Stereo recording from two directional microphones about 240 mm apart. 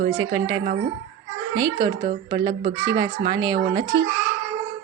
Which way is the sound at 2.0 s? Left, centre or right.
Right.